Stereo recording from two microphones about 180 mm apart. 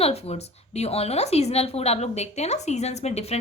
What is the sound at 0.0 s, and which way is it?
A woman's voice, 35° left (ahead or behind).